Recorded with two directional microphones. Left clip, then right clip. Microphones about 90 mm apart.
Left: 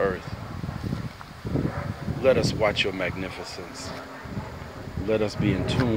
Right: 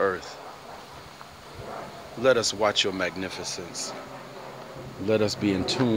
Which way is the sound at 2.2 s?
25° right (ahead or behind).